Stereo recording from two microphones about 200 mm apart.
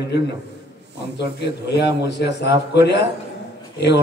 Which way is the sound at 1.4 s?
55° left (ahead or behind).